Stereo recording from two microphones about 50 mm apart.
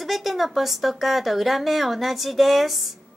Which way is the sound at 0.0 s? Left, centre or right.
Centre.